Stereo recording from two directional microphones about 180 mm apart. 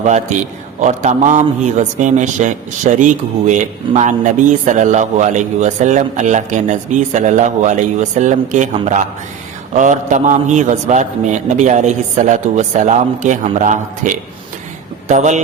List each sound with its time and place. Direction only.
0.0 s a man's voice: 40° right (ahead or behind)